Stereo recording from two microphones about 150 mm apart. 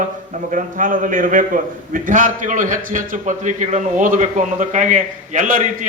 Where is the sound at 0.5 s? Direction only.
65° right (ahead or behind).